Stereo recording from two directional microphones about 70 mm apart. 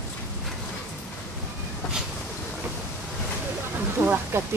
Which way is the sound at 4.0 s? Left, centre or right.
Right.